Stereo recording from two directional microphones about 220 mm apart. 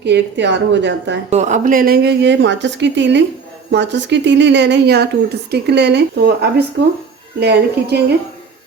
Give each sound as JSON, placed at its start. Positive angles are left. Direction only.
{"t": 0.0, "sound": "a woman's voice", "side_deg": -50}
{"t": 1.3, "sound": "a woman's voice", "side_deg": -30}